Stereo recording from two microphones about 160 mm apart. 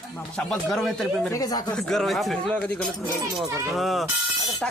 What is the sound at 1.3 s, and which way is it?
Speech, 20° left (ahead or behind).